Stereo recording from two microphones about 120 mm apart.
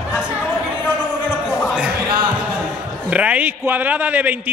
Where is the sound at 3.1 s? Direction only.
10° right (ahead or behind).